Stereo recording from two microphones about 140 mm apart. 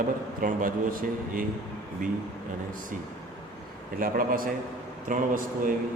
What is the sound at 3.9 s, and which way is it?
Speech, 90° right.